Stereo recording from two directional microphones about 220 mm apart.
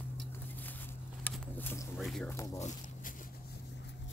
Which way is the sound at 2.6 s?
35° left (ahead or behind).